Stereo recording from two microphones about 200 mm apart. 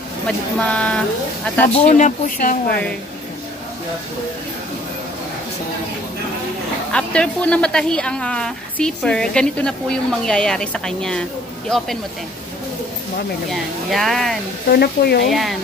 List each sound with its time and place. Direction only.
0.6 s a woman's voice: 5° left (ahead or behind)
1.7 s speech: 35° left (ahead or behind)
6.9 s a woman's voice: 5° left (ahead or behind)
13.5 s a woman's voice: centre (ahead or behind)
14.7 s speech: 50° left (ahead or behind)
15.2 s a woman's voice: centre (ahead or behind)